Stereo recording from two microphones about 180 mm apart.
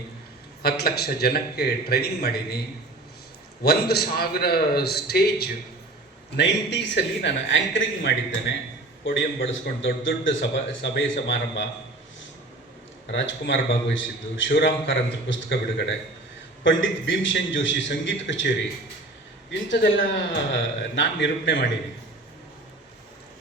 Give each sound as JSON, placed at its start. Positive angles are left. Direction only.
{"t": 0.6, "sound": "a man's voice", "side_deg": 60}
{"t": 3.6, "sound": "a man's voice", "side_deg": 60}
{"t": 6.3, "sound": "a man's voice", "side_deg": 75}
{"t": 13.1, "sound": "a man's voice", "side_deg": 80}